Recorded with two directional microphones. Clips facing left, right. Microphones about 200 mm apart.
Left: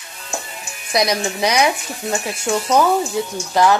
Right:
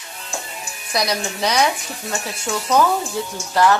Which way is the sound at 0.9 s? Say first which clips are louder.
Left 4 dB; 20° left (ahead or behind).